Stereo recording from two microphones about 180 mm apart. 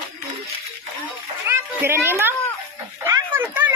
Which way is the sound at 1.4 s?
15° right (ahead or behind).